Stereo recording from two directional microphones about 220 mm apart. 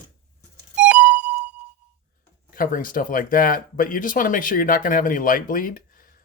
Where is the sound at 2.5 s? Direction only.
40° left (ahead or behind).